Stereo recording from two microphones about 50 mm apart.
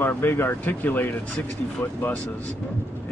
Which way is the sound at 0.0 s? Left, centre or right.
Left.